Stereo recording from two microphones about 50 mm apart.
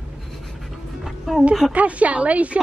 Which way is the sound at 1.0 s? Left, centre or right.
Centre.